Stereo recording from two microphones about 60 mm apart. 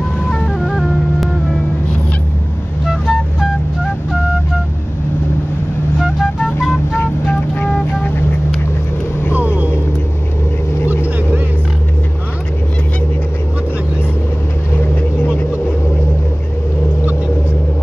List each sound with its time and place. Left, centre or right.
0.3 s music: centre
2.9 s music: centre
5.9 s music: centre
7.0 s vehicle: left